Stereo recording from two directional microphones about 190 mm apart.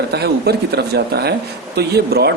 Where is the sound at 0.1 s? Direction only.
55° right (ahead or behind).